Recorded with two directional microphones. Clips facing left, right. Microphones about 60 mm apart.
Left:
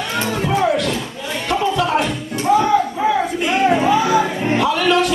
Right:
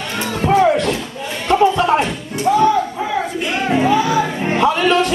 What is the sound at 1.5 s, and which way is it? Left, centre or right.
Music, right.